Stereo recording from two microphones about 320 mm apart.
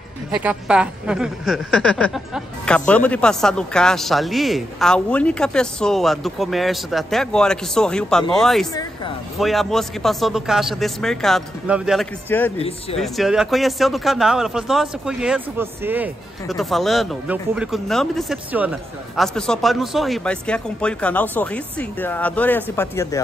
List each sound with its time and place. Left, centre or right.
0.4 s a man's voice: centre
12.5 s speech: centre
13.0 s a man's voice: centre